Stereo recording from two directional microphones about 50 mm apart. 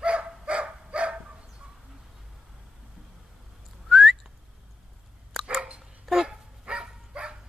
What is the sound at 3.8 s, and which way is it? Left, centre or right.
Whistling, centre.